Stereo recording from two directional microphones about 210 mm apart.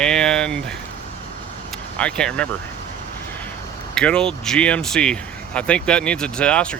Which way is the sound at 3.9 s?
5° left (ahead or behind).